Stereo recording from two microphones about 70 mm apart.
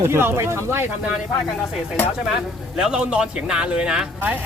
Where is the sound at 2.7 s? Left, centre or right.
Centre.